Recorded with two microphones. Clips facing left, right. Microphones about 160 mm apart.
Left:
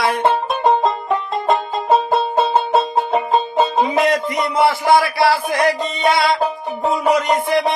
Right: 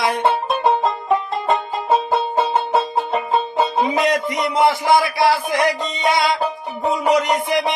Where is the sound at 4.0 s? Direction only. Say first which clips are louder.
Left 2 dB; 20° right (ahead or behind).